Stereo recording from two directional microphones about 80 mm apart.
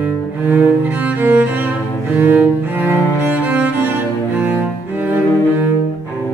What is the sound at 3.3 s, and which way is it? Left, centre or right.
Music, centre.